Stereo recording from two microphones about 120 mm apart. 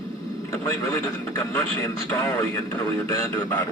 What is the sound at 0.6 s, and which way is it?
Speech, 25° left (ahead or behind).